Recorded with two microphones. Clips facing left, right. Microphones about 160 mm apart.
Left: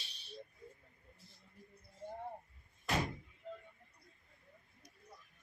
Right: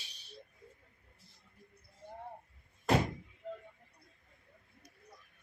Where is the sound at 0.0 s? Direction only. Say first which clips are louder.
Left 2 dB; 10° right (ahead or behind).